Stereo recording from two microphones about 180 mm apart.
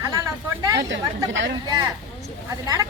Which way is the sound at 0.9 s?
90° right.